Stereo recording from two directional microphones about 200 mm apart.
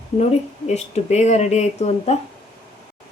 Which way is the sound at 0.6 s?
35° left (ahead or behind).